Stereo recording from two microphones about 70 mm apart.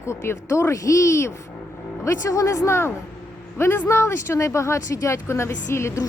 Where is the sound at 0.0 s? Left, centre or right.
Left.